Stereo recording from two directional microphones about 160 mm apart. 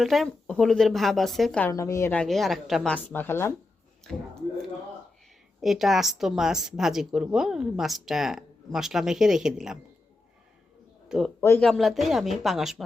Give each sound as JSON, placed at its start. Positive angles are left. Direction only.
{"t": 0.0, "sound": "a woman's voice", "side_deg": 0}
{"t": 1.6, "sound": "a woman's voice", "side_deg": 20}
{"t": 2.2, "sound": "a woman's voice", "side_deg": 0}
{"t": 5.6, "sound": "a woman's voice", "side_deg": 0}
{"t": 11.3, "sound": "a woman's voice", "side_deg": 10}